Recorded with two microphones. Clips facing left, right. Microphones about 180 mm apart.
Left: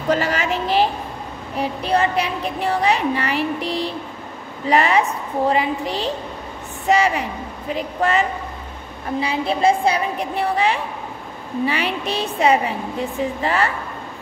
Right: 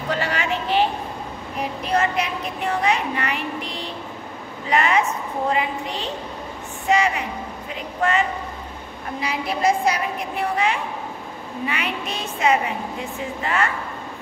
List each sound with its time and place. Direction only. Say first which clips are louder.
0.1 s a sound: left 5 dB; 40° left (ahead or behind)
1.6 s speech: left 3 dB; 30° left (ahead or behind)
9.2 s a woman's voice: left 3 dB; 30° left (ahead or behind)